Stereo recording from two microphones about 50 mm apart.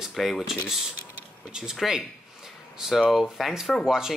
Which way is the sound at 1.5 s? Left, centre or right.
Centre.